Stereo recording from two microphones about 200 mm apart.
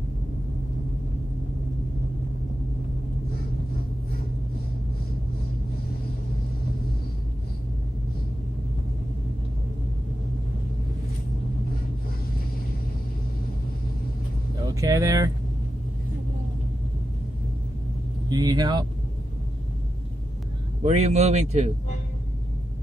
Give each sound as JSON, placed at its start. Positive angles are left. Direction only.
{"t": 14.7, "sound": "speech", "side_deg": -15}
{"t": 18.3, "sound": "speech", "side_deg": -20}
{"t": 20.8, "sound": "a man's voice", "side_deg": -35}